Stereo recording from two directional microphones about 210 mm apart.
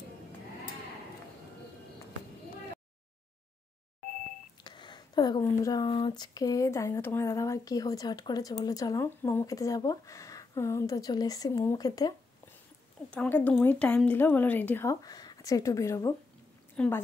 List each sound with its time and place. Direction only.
4.6 s speech: 20° left (ahead or behind)
13.1 s speech: 5° left (ahead or behind)